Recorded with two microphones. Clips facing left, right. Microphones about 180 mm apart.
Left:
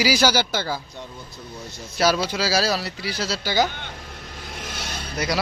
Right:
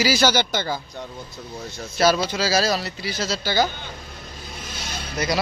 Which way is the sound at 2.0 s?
10° left (ahead or behind).